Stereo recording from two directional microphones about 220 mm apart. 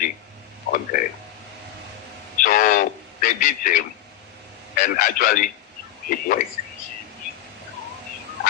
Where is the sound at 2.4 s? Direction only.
40° left (ahead or behind).